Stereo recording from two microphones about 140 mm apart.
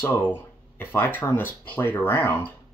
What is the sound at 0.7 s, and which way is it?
Speech, 15° left (ahead or behind).